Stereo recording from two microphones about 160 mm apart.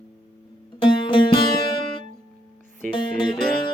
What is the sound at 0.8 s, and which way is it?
Music, 30° left (ahead or behind).